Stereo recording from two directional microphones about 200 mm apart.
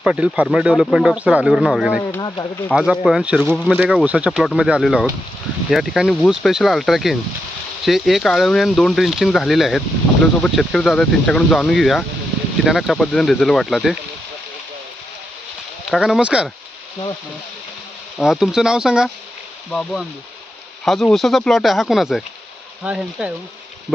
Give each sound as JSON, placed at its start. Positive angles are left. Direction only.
{"t": 0.0, "sound": "speech", "side_deg": -5}
{"t": 2.2, "sound": "speech", "side_deg": 20}
{"t": 2.6, "sound": "speech", "side_deg": -5}
{"t": 15.9, "sound": "speech", "side_deg": 0}
{"t": 18.2, "sound": "speech", "side_deg": 0}